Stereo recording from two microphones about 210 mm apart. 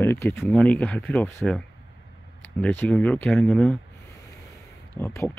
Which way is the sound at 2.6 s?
5° left (ahead or behind).